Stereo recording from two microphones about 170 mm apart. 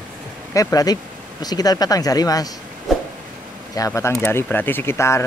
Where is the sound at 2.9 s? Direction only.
Centre (ahead or behind).